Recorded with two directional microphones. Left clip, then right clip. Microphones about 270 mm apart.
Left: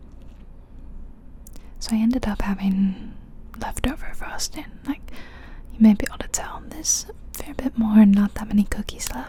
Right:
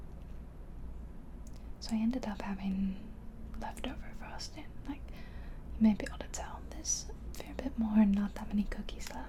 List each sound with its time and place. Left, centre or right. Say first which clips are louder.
1.8 s speech: left 12 dB; left